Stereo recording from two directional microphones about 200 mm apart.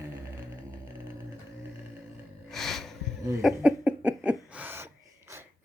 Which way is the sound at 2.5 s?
Centre (ahead or behind).